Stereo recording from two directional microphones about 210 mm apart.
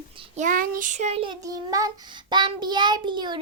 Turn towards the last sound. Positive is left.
turn(degrees=-20)  # may be behind; listen again after turning